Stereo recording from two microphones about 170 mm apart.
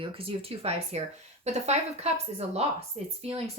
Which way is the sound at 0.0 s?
35° right (ahead or behind).